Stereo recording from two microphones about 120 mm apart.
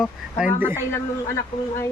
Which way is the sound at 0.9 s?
20° left (ahead or behind).